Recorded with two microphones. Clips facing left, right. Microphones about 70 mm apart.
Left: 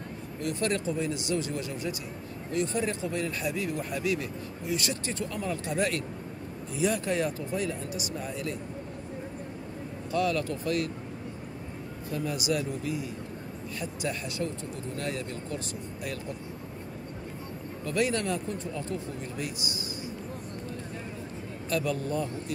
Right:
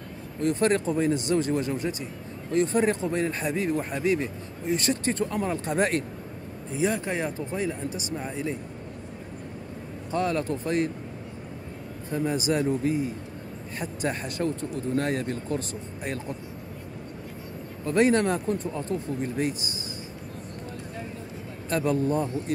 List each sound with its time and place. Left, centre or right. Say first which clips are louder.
0.4 s speech: right 7 dB; right
6.7 s speech: right 1 dB; right
10.1 s speech: right 2 dB; right
12.1 s speech: right 4 dB; right
17.8 s speech: right 7 dB; right
21.6 s speech: right 5 dB; right